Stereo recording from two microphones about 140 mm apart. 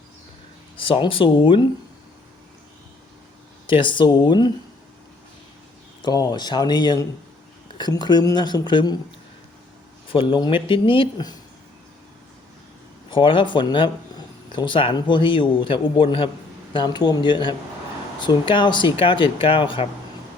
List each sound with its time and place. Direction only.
0.8 s speech: 40° left (ahead or behind)
3.7 s speech: 35° left (ahead or behind)
6.0 s speech: 30° left (ahead or behind)
10.1 s speech: 40° left (ahead or behind)
13.1 s speech: 35° left (ahead or behind)